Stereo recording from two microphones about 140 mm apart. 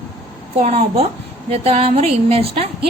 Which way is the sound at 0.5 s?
60° right (ahead or behind).